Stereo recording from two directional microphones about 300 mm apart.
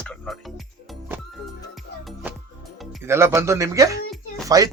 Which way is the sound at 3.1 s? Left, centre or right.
Centre.